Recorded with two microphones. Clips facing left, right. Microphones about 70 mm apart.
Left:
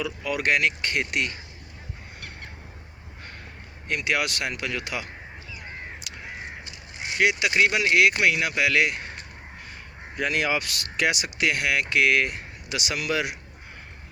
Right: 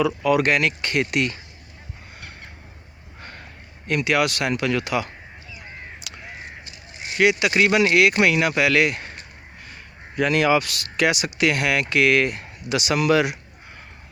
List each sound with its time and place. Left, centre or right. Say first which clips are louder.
0.0 s speech: right 8 dB; right
3.8 s speech: right 5 dB; right
7.2 s speech: right 3 dB; right
10.2 s speech: right 7 dB; right